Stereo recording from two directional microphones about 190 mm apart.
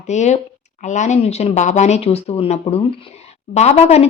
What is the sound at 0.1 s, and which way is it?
A woman's voice, 40° left (ahead or behind).